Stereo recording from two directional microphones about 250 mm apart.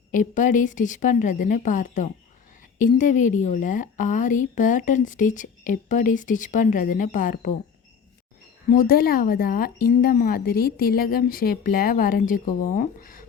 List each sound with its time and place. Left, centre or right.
0.1 s a woman's voice: left
8.7 s a woman's voice: left